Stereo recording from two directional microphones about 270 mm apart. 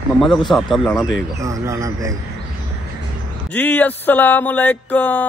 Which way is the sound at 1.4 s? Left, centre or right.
Centre.